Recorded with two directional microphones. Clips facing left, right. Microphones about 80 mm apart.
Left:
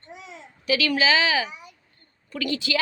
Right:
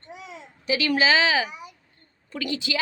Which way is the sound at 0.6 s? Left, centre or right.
Right.